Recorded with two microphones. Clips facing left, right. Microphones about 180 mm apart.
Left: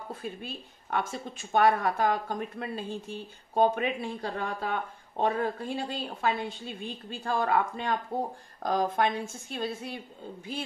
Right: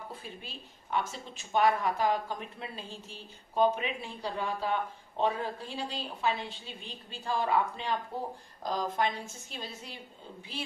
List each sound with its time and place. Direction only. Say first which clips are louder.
0.2 s a woman's voice: left 7 dB; 50° left (ahead or behind)
8.6 s a woman's voice: left 4 dB; 55° left (ahead or behind)